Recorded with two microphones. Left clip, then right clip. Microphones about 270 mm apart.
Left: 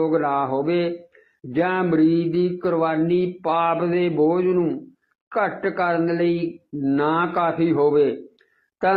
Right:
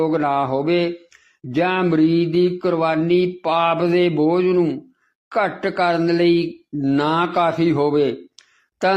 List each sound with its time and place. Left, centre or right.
0.0 s mantra: right
5.3 s speech: right